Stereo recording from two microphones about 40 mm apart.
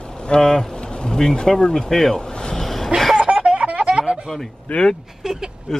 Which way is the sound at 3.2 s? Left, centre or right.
Right.